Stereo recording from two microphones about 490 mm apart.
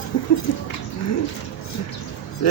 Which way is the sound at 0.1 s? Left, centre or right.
Left.